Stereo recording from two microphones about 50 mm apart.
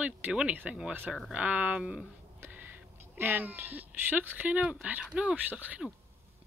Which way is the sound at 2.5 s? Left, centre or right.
Right.